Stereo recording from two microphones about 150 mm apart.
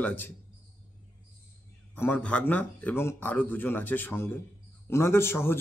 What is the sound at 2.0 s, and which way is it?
A man's voice, 10° left (ahead or behind).